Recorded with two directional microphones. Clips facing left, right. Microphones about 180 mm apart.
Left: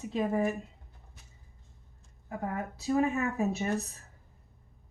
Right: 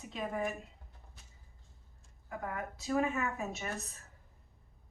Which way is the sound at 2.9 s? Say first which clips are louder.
Left 5 dB; 35° left (ahead or behind).